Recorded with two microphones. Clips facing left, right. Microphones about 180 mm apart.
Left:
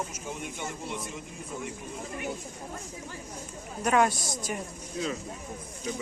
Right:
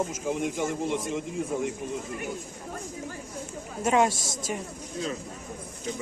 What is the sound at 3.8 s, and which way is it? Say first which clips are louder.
Speech: right 1 dB; 25° right (ahead or behind).